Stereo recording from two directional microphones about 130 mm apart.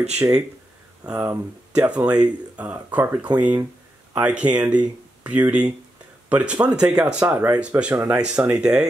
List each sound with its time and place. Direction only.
0.2 s speech: 20° right (ahead or behind); by 8.8 s 5° right (ahead or behind)